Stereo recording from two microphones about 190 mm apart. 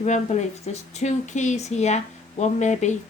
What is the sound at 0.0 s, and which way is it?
A woman's voice, 35° left (ahead or behind).